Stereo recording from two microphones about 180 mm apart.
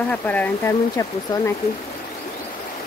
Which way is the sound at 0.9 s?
20° left (ahead or behind).